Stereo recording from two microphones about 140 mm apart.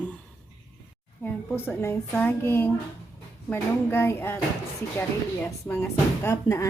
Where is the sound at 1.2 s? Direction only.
10° left (ahead or behind).